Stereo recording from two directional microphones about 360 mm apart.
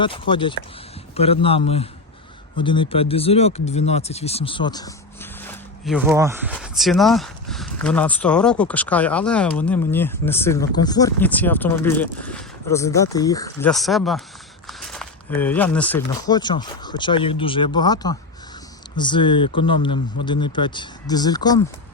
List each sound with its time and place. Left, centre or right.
0.0 s speech: centre